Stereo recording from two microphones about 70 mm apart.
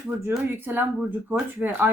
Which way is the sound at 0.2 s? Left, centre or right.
Right.